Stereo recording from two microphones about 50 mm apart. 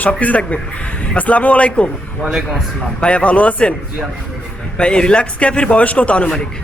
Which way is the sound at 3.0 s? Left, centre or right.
Left.